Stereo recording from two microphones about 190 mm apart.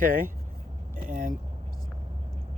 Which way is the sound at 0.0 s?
45° right (ahead or behind).